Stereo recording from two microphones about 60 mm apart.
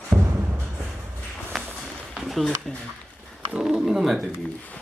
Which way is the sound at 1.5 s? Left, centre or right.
Centre.